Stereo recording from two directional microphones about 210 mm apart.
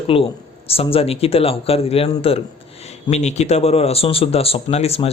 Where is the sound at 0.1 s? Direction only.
25° left (ahead or behind).